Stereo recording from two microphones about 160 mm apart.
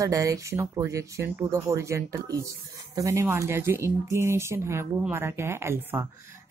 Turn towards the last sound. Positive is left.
turn(degrees=-15)  # may be behind; listen again after turning